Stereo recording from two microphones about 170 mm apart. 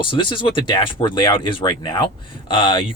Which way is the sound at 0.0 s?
30° left (ahead or behind).